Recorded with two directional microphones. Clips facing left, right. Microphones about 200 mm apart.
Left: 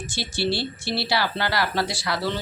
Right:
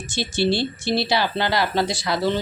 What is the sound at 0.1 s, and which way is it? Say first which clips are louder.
Speech: right 5 dB; 20° right (ahead or behind).